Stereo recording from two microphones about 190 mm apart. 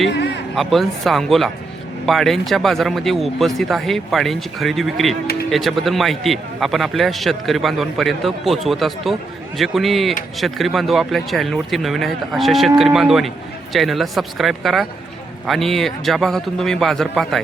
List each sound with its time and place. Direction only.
0.5 s a man's voice: centre (ahead or behind)